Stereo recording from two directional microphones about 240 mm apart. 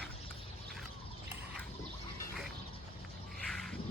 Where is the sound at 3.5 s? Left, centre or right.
Centre.